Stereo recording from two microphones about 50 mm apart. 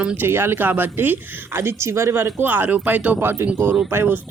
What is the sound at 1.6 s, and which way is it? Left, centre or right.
Speech, right.